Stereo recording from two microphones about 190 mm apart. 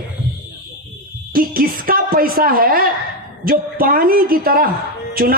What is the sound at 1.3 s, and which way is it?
A man's voice, 50° right (ahead or behind).